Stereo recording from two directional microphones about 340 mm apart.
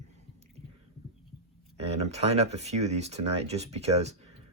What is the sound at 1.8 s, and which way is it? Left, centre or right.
Speech, centre.